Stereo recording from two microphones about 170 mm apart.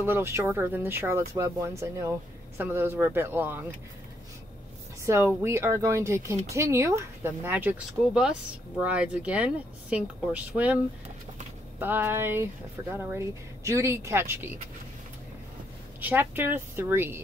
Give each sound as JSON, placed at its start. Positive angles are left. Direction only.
{"t": 0.0, "sound": "speech", "side_deg": -15}
{"t": 5.0, "sound": "speech", "side_deg": -15}
{"t": 11.8, "sound": "speech", "side_deg": -15}
{"t": 16.0, "sound": "speech", "side_deg": -10}